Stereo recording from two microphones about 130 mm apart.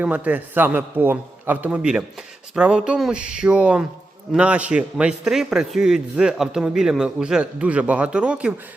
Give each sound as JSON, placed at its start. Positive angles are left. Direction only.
{"t": 0.0, "sound": "a man's voice", "side_deg": -10}